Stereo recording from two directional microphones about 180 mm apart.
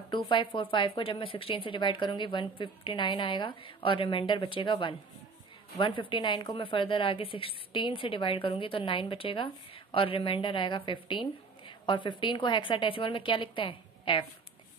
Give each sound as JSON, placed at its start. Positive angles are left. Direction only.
{"t": 0.1, "sound": "a woman's voice", "side_deg": 30}